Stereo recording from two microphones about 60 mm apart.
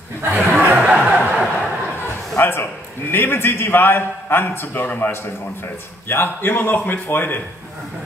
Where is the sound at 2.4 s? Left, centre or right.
Left.